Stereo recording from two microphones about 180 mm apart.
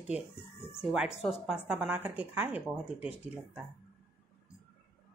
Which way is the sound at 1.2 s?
5° right (ahead or behind).